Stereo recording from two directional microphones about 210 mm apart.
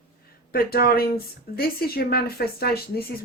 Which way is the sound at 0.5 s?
45° left (ahead or behind).